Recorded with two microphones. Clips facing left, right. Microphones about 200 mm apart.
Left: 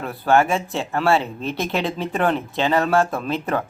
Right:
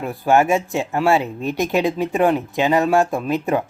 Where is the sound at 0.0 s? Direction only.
15° right (ahead or behind).